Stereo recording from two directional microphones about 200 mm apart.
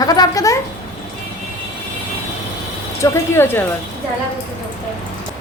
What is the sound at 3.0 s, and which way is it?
Speech, 10° left (ahead or behind).